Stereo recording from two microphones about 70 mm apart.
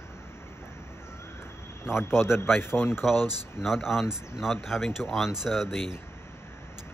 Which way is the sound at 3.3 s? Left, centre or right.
Centre.